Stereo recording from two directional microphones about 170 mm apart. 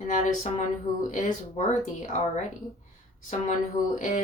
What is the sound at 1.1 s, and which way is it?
Speech, 45° left (ahead or behind).